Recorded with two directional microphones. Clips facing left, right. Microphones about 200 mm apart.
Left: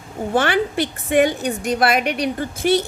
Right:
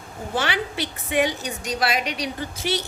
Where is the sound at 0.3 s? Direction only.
50° left (ahead or behind).